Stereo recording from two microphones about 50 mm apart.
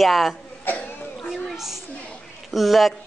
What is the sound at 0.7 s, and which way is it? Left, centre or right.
Cough, left.